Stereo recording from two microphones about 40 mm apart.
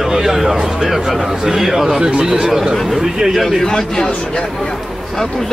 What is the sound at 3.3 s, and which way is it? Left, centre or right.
Speech, centre.